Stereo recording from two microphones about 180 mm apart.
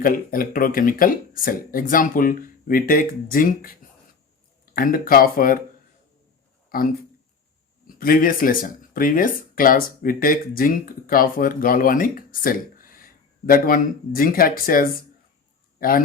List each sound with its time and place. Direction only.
0.0 s speech: 50° left (ahead or behind)
6.7 s speech: 55° left (ahead or behind)